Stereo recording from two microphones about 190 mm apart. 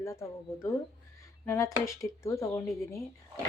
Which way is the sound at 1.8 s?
15° left (ahead or behind).